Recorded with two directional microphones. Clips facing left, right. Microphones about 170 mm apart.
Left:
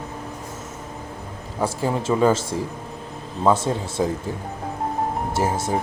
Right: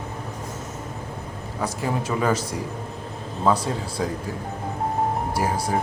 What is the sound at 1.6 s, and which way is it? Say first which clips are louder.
A man's voice: left 3 dB; 30° left (ahead or behind).